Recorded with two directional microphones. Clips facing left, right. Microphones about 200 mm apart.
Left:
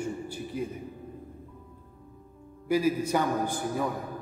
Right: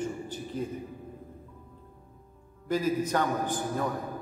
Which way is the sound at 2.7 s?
10° left (ahead or behind).